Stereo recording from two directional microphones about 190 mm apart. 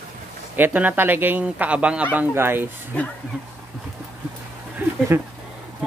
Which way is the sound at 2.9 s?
10° left (ahead or behind).